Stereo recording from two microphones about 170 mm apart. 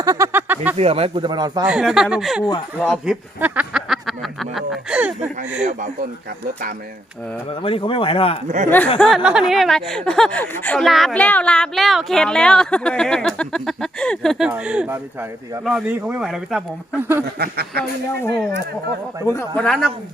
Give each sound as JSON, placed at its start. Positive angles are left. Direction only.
{"t": 0.0, "sound": "a sound", "side_deg": -20}
{"t": 0.8, "sound": "speech", "side_deg": -35}
{"t": 1.6, "sound": "speech", "side_deg": -5}
{"t": 3.4, "sound": "a sound", "side_deg": -10}
{"t": 7.6, "sound": "speech", "side_deg": 30}
{"t": 8.4, "sound": "speech", "side_deg": -45}
{"t": 9.0, "sound": "speech", "side_deg": 0}
{"t": 17.4, "sound": "a man's voice", "side_deg": -65}
{"t": 19.2, "sound": "speech", "side_deg": 15}
{"t": 19.6, "sound": "speech", "side_deg": 5}